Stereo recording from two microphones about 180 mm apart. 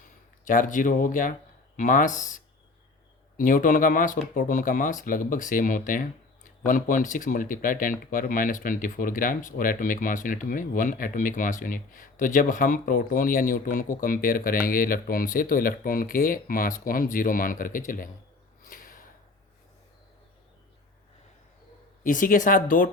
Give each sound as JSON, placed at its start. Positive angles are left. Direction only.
{"t": 0.0, "sound": "speech", "side_deg": 50}
{"t": 18.6, "sound": "a sound", "side_deg": 50}
{"t": 22.0, "sound": "speech", "side_deg": 50}